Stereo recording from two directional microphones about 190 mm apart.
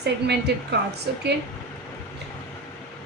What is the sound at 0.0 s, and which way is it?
Speech, 60° right (ahead or behind).